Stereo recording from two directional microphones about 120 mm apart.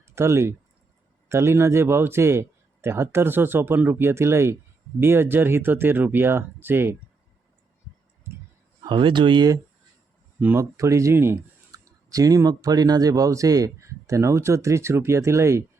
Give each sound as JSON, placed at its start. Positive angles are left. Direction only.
{"t": 0.0, "sound": "speech", "side_deg": -20}
{"t": 8.8, "sound": "speech", "side_deg": -40}
{"t": 10.4, "sound": "speech", "side_deg": -15}